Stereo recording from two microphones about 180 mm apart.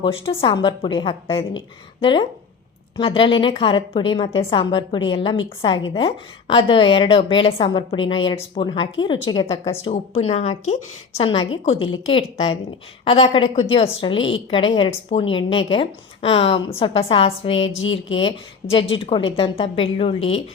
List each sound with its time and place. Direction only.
0.0 s a woman's voice: 30° left (ahead or behind)